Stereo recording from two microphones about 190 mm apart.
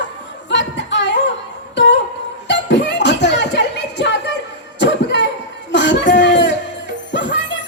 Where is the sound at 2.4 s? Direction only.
65° left (ahead or behind).